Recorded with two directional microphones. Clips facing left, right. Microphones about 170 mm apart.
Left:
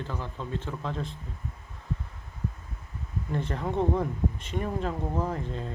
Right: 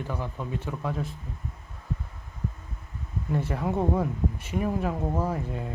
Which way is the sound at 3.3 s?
10° right (ahead or behind).